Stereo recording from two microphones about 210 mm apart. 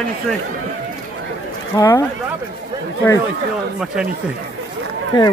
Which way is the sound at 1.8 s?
15° left (ahead or behind).